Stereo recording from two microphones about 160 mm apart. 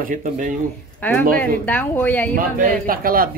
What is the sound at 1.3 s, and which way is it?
Speech, 10° left (ahead or behind).